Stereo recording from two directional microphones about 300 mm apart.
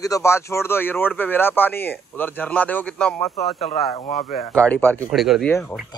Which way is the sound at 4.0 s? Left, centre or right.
Left.